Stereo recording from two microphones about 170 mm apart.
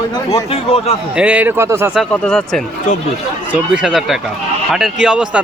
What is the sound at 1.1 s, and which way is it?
Speech, 5° right (ahead or behind).